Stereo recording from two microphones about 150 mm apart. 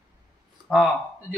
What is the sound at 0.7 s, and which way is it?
Speech, 5° right (ahead or behind).